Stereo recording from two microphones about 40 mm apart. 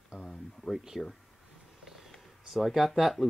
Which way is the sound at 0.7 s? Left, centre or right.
Centre.